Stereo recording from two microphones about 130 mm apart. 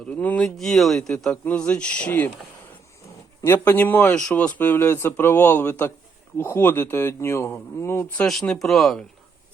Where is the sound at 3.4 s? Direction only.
15° left (ahead or behind).